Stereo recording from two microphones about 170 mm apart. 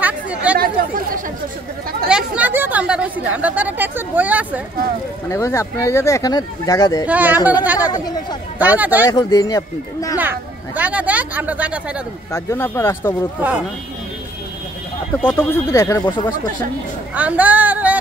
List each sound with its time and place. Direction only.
0.0 s chatter: 10° right (ahead or behind)
2.0 s speech: 5° right (ahead or behind)
5.3 s speech: 15° left (ahead or behind)
7.1 s speech: 10° right (ahead or behind)
7.9 s speech: 25° left (ahead or behind)
8.5 s speech: 10° right (ahead or behind)
9.0 s speech: 20° left (ahead or behind)
10.1 s speech: 10° right (ahead or behind)
12.3 s speech: 15° left (ahead or behind)
15.2 s speech: 15° left (ahead or behind)
16.0 s speech: 30° left (ahead or behind)
17.1 s speech: 10° right (ahead or behind)